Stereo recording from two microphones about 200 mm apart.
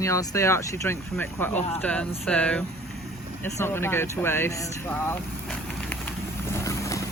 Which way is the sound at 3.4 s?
10° left (ahead or behind).